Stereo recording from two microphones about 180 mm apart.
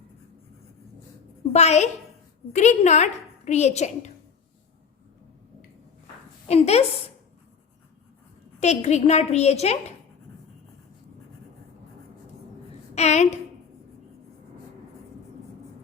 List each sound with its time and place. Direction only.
1.5 s a woman's voice: 40° left (ahead or behind)
6.5 s a woman's voice: 35° left (ahead or behind)
8.6 s a woman's voice: 40° left (ahead or behind)
12.9 s a woman's voice: 35° left (ahead or behind)